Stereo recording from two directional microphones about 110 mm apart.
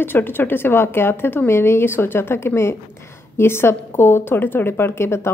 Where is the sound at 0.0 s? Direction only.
20° left (ahead or behind).